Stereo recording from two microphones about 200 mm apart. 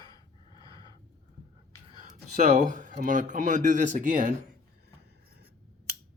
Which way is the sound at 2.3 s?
35° right (ahead or behind).